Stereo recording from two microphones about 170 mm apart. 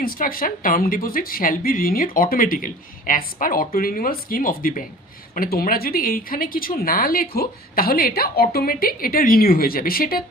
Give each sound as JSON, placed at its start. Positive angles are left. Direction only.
{"t": 0.0, "sound": "speech", "side_deg": 60}